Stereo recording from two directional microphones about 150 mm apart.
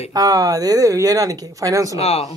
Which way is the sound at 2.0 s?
40° left (ahead or behind).